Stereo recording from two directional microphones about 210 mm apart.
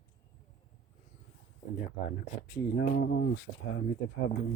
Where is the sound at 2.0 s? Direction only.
50° left (ahead or behind).